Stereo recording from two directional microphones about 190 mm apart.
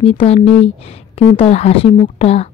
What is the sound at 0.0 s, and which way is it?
Speech, 30° left (ahead or behind).